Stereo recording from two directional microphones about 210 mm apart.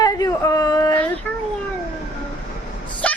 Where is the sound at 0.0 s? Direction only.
15° left (ahead or behind).